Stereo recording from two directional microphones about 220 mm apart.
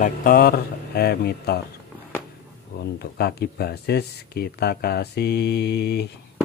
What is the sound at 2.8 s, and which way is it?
Speech, 45° left (ahead or behind).